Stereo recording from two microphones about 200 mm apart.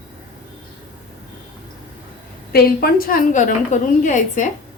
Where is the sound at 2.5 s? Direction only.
50° left (ahead or behind).